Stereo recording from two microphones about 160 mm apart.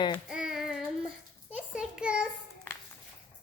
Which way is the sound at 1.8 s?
5° right (ahead or behind).